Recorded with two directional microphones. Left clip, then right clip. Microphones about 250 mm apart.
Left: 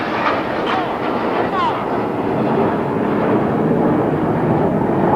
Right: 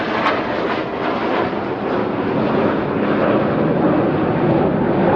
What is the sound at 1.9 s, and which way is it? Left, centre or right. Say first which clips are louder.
Vehicle: even; right.